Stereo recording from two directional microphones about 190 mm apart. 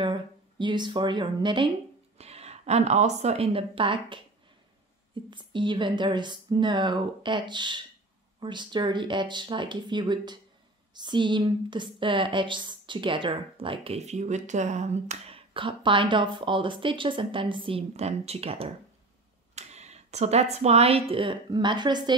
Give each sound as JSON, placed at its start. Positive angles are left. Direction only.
{"t": 0.0, "sound": "a woman's voice", "side_deg": -25}
{"t": 5.3, "sound": "speech", "side_deg": -25}